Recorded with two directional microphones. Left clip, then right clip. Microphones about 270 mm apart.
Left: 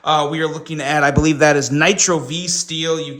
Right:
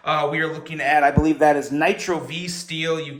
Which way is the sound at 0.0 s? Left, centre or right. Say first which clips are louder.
Left 4 dB; centre.